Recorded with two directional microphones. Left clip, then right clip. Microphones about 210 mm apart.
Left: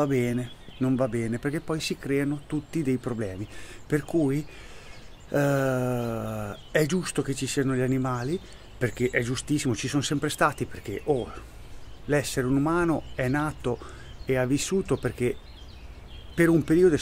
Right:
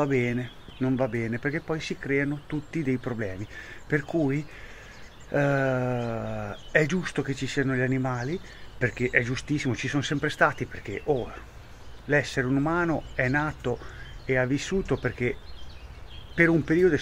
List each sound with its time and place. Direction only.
0.0 s speech: 5° left (ahead or behind)
16.3 s speech: 10° left (ahead or behind)